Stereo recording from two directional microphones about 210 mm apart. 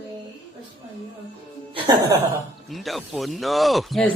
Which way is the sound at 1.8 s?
20° right (ahead or behind).